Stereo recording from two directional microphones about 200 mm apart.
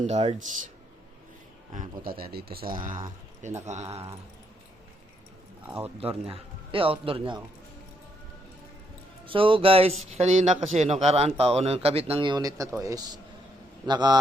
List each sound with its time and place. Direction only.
0.1 s speech: 35° right (ahead or behind)
1.7 s a man's voice: 40° right (ahead or behind)
3.7 s speech: 35° right (ahead or behind)
6.0 s speech: 30° right (ahead or behind)
9.2 s speech: 25° right (ahead or behind)